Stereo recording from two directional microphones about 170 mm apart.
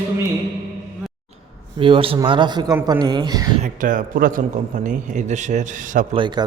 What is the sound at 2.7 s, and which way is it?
Speech, 15° right (ahead or behind).